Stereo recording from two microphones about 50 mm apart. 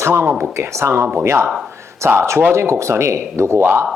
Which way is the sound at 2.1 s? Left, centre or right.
Right.